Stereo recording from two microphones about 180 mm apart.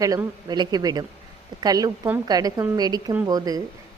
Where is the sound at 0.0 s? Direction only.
20° right (ahead or behind).